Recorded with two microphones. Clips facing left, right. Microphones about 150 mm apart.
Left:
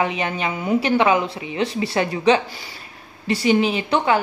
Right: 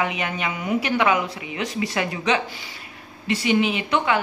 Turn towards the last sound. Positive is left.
turn(degrees=35)  # may be behind; listen again after turning